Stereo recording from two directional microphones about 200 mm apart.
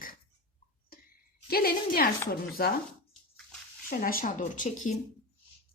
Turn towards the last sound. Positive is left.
turn(degrees=35)  # may be behind; listen again after turning